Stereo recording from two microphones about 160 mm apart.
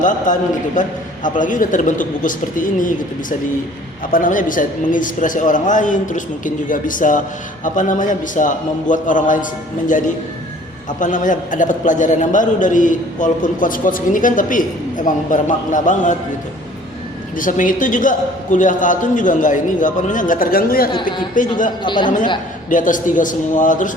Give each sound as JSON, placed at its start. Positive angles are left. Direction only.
{"t": 0.0, "sound": "a man's voice", "side_deg": 50}
{"t": 11.0, "sound": "a man's voice", "side_deg": 55}
{"t": 17.3, "sound": "a man's voice", "side_deg": 55}
{"t": 20.9, "sound": "a woman's voice", "side_deg": 30}
{"t": 22.7, "sound": "a man's voice", "side_deg": 55}